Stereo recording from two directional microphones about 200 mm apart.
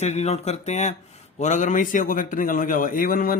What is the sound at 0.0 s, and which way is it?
Speech, 35° left (ahead or behind).